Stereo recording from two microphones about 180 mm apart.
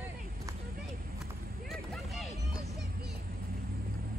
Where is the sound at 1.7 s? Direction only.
Centre (ahead or behind).